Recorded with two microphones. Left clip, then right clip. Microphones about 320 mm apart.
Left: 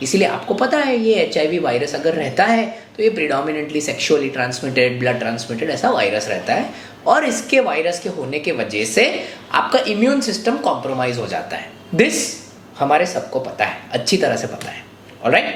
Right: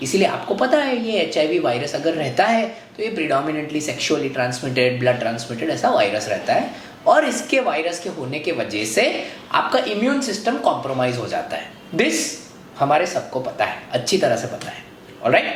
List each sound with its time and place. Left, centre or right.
0.0 s a man's voice: left